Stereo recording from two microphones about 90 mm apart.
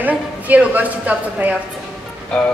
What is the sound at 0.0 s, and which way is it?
A woman's voice, 15° right (ahead or behind).